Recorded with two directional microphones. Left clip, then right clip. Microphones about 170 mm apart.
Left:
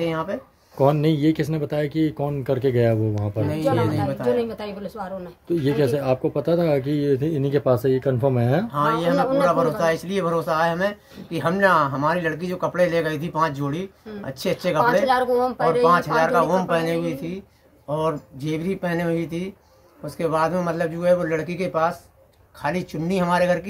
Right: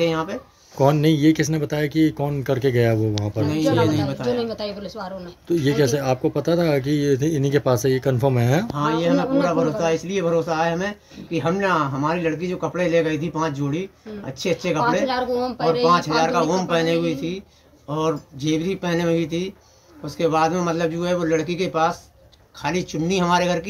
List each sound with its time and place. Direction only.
0.0 s speech: 5° right (ahead or behind)
4.4 s speech: 25° left (ahead or behind)
5.5 s speech: centre (ahead or behind)
15.0 s speech: 25° left (ahead or behind)
15.9 s speech: 5° right (ahead or behind)